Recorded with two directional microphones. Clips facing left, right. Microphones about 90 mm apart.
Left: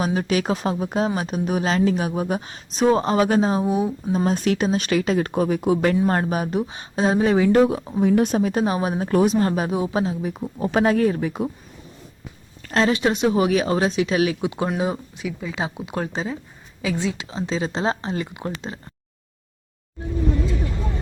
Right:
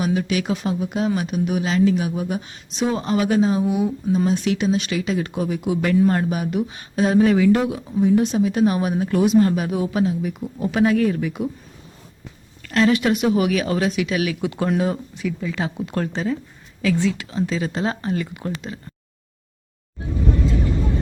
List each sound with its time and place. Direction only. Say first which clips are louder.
0.0 s speech: even; 40° left (ahead or behind)
7.4 s speech: left 1 dB; 40° left (ahead or behind)
8.6 s speech: right 3 dB; 30° left (ahead or behind)
12.6 s speech: right 2 dB; 30° left (ahead or behind)
14.4 s speech: right 2 dB; 20° left (ahead or behind)